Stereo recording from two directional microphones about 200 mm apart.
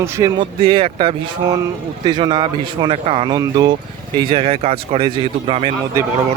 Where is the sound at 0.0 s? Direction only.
15° right (ahead or behind).